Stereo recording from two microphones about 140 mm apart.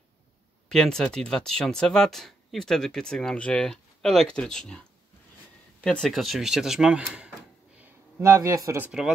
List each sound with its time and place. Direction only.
0.7 s speech: 5° left (ahead or behind)
8.2 s speech: 25° right (ahead or behind)
8.8 s speech: 5° right (ahead or behind)